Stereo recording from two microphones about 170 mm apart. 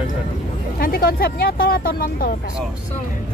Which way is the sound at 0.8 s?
60° left (ahead or behind).